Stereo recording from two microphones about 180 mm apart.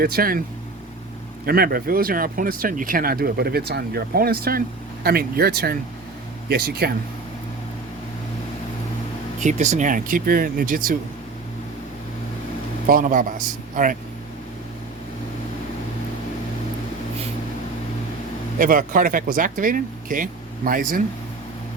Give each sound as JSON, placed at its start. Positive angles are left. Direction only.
{"t": 0.0, "sound": "speech", "side_deg": -55}
{"t": 1.5, "sound": "speech", "side_deg": -55}
{"t": 9.4, "sound": "speech", "side_deg": -40}
{"t": 12.9, "sound": "speech", "side_deg": -50}
{"t": 18.6, "sound": "speech", "side_deg": -50}